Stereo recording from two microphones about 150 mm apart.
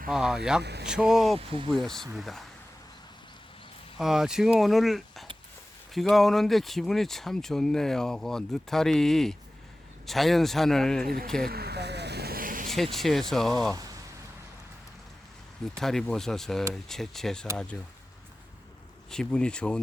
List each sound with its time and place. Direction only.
0.1 s speech: 5° right (ahead or behind)
0.6 s speech: 90° right
0.9 s speech: 5° right (ahead or behind)
1.4 s speech: 35° right (ahead or behind)
1.7 s speech: centre (ahead or behind)
3.9 s speech: centre (ahead or behind)
11.4 s vehicle: 90° right; by 12.7 s 65° right (ahead or behind)
12.7 s speech: centre (ahead or behind)
15.8 s speech: centre (ahead or behind)
19.1 s speech: 5° left (ahead or behind)